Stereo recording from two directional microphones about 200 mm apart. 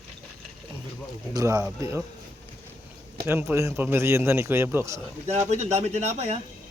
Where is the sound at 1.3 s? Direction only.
15° right (ahead or behind).